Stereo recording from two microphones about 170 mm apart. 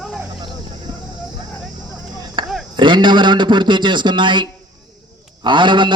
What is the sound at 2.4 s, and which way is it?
Chop, 30° right (ahead or behind).